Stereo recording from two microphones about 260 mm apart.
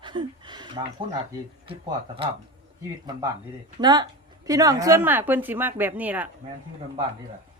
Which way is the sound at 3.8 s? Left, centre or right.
Centre.